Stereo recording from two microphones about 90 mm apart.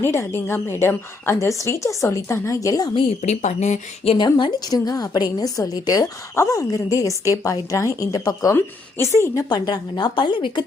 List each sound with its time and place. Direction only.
0.0 s a woman's voice: 30° left (ahead or behind)
4.0 s a woman's voice: 90° left
4.3 s a woman's voice: 50° left (ahead or behind)
8.5 s a woman's voice: 30° left (ahead or behind)
9.5 s a woman's voice: 50° left (ahead or behind)